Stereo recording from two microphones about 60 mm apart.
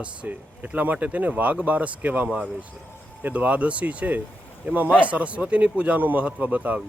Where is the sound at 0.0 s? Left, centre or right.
Right.